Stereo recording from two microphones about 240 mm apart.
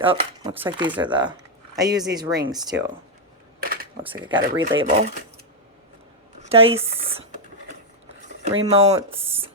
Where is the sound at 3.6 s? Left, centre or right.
Right.